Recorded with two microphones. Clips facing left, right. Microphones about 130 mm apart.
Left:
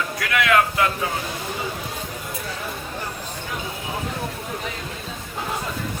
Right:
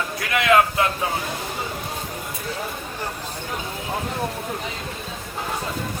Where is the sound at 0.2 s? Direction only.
25° right (ahead or behind).